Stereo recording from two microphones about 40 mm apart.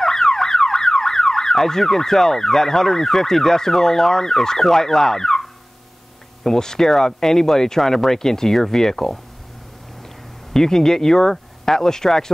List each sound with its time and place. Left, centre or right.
0.0 s car alarm: centre
6.4 s speech: centre
10.5 s speech: centre